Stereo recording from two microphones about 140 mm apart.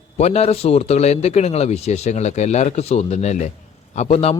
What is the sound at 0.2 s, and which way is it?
A man's voice, 50° left (ahead or behind).